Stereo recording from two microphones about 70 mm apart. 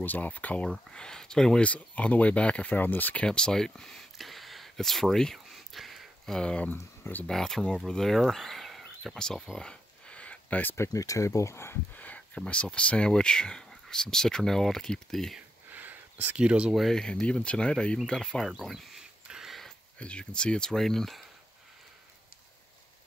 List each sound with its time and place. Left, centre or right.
0.0 s speech: left
0.7 s speech: centre
1.7 s speech: centre
3.3 s a sound: centre
6.7 s speech: left
7.2 s speech: centre; by 10.8 s left
10.9 s speech: left
11.9 s a sound: left
12.4 s speech: centre
15.7 s a sound: right
16.4 s speech: centre
16.7 s speech: centre
18.6 s a sound: centre
20.0 s speech: centre